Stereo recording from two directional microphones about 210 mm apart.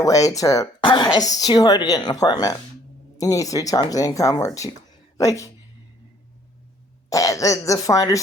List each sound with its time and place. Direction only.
0.0 s speech: 15° left (ahead or behind)
7.1 s speech: 15° left (ahead or behind)